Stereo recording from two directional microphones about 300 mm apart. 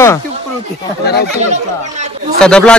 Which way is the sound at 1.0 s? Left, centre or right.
Left.